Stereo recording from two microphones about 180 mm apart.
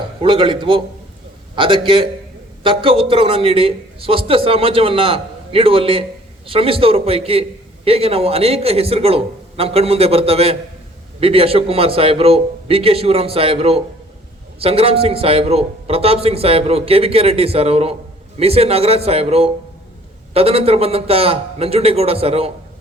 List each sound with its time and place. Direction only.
0.2 s a man's voice: 30° right (ahead or behind)